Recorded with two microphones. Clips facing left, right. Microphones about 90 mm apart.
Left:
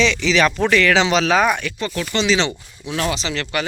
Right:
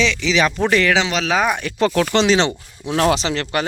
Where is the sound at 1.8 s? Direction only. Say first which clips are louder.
Right 7 dB; 75° right (ahead or behind).